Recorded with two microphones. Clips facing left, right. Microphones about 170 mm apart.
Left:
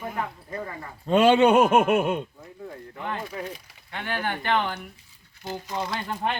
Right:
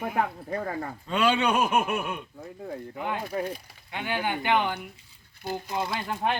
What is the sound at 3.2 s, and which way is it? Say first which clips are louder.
Speech: right 4 dB; 45° right (ahead or behind).